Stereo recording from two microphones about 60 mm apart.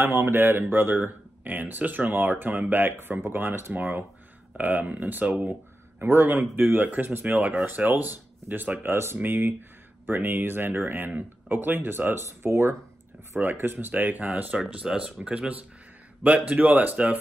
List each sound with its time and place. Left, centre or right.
0.3 s speech: right
6.0 s speech: right
8.8 s speech: right
13.4 s speech: right